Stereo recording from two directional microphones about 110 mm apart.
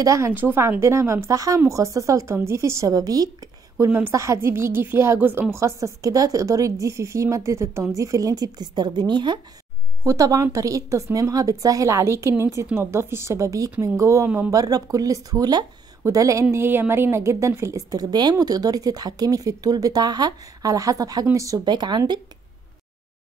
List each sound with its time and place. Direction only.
0.0 s speech: 30° right (ahead or behind)
0.3 s a woman's voice: 20° right (ahead or behind); by 9.4 s 45° right (ahead or behind)
10.0 s a woman's voice: 30° right (ahead or behind)
14.5 s a woman's voice: 35° right (ahead or behind)
21.6 s speech: 40° right (ahead or behind)